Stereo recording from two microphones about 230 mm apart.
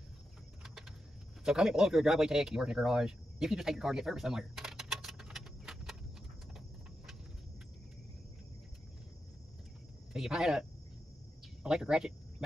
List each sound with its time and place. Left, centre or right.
1.4 s speech: centre
10.1 s speech: centre